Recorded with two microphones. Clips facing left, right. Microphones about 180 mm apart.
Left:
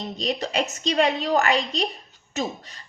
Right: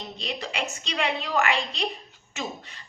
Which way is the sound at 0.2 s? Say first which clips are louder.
Left 7 dB; 40° left (ahead or behind).